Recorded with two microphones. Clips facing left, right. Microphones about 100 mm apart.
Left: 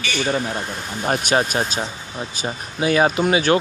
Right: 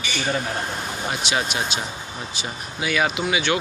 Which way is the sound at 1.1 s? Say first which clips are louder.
Left 7 dB; 40° left (ahead or behind).